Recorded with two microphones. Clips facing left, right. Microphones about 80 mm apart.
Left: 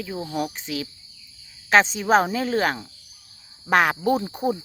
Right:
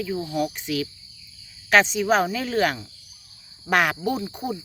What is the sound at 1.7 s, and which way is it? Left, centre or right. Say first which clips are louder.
Cricket: left 1 dB; left.